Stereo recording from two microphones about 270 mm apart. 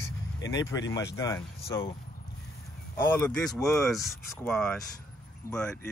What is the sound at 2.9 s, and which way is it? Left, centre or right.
Speech, centre.